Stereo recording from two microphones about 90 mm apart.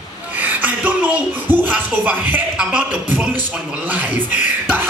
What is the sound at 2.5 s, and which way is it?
Speech, 15° right (ahead or behind).